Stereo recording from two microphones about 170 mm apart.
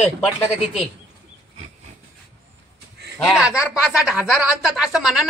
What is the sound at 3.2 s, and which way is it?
Speech, 5° right (ahead or behind).